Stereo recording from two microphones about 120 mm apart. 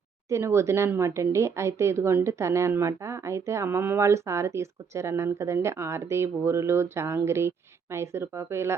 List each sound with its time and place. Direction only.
0.3 s speech: 25° right (ahead or behind)